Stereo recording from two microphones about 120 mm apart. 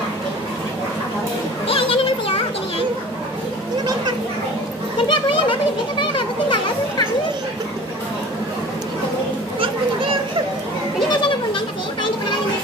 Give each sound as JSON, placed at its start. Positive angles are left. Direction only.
{"t": 1.7, "sound": "children playing", "side_deg": 50}
{"t": 5.0, "sound": "children playing", "side_deg": 45}